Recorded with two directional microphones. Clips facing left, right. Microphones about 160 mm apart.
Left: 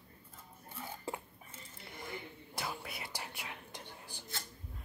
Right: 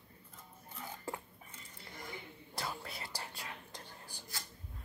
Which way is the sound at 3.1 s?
20° left (ahead or behind).